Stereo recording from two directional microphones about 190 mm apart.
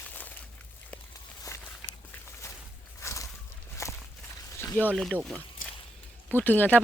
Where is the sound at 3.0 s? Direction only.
15° left (ahead or behind).